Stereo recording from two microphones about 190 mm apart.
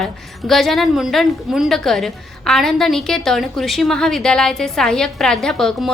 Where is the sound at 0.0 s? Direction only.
Centre (ahead or behind).